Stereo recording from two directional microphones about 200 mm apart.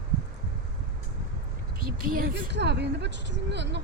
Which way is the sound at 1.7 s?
50° right (ahead or behind).